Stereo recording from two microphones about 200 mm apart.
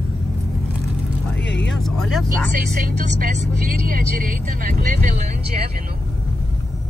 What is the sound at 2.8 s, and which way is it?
Speech, 45° right (ahead or behind).